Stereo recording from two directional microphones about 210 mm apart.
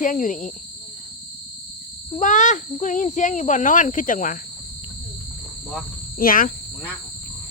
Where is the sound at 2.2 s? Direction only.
35° left (ahead or behind).